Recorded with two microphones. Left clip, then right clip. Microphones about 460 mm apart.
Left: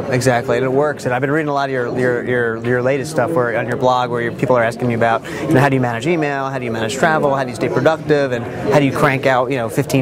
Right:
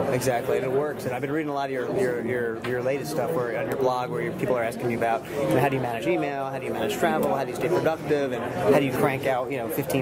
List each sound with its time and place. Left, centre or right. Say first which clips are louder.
0.1 s speech: left 14 dB; left